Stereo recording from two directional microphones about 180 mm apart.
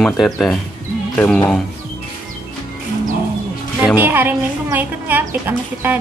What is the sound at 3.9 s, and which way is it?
Speech, 10° right (ahead or behind).